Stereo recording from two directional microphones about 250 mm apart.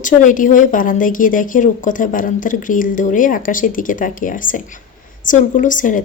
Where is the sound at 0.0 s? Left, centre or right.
Left.